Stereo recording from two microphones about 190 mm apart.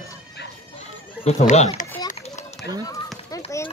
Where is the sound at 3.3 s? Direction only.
20° left (ahead or behind).